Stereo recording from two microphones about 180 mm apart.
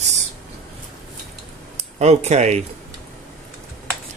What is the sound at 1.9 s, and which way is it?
Speech, 40° right (ahead or behind).